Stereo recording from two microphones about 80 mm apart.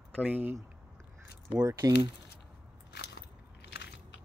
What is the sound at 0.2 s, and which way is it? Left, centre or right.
Speech, right.